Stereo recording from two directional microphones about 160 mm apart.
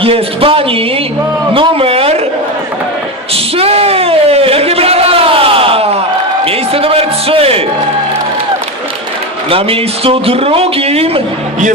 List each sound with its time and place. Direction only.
0.0 s a man's voice: 35° right (ahead or behind)
3.3 s a sound: 40° right (ahead or behind)
6.4 s music: 35° right (ahead or behind)
9.5 s speech: 35° right (ahead or behind)